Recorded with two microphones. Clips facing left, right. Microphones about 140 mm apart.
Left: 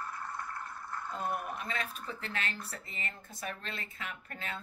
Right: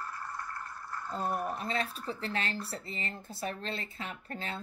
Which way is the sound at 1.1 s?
35° right (ahead or behind).